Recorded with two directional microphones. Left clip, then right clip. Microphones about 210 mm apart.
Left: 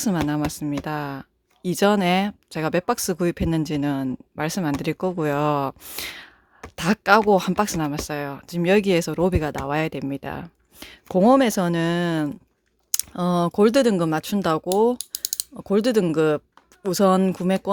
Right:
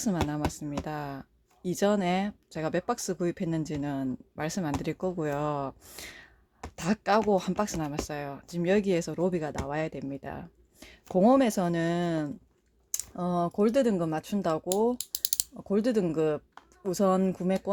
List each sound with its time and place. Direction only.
0.3 s speech: 35° left (ahead or behind)
14.9 s ratchet: 5° right (ahead or behind)
15.5 s speech: 35° left (ahead or behind)